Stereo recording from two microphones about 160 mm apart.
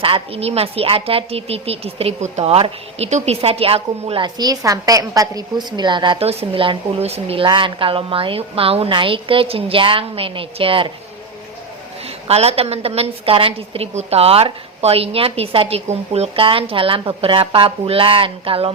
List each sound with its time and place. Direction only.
0.0 s speech: 35° right (ahead or behind)
12.0 s speech: 40° right (ahead or behind)